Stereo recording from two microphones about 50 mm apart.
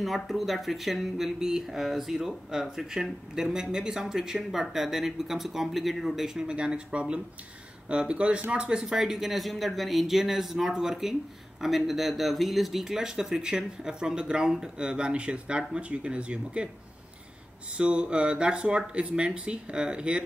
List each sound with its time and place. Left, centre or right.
0.0 s speech: centre
6.4 s speech: centre
17.7 s speech: right